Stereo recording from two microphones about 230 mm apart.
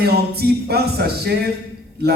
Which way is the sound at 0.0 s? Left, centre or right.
Right.